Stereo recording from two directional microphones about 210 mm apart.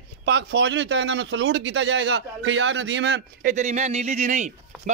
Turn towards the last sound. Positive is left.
turn(degrees=-35)  # may be behind; listen again after turning